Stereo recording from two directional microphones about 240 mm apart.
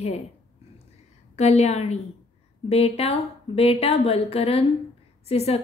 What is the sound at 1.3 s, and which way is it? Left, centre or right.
A woman's voice, left.